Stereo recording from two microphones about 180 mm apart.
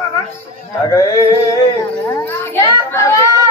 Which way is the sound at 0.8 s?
20° left (ahead or behind).